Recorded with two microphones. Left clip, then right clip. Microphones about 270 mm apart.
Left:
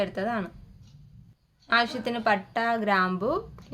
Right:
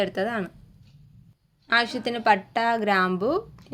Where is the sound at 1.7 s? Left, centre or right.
Centre.